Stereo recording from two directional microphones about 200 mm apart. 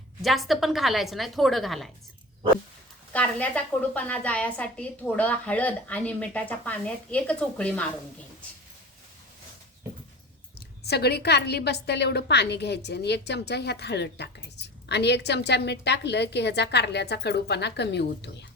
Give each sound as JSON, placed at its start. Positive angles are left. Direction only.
{"t": 0.2, "sound": "a woman's voice", "side_deg": 0}
{"t": 3.1, "sound": "a woman's voice", "side_deg": 5}
{"t": 10.8, "sound": "a woman's voice", "side_deg": 55}